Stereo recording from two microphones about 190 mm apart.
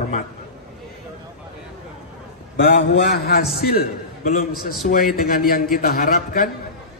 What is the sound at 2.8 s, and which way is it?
A man's voice, 60° left (ahead or behind).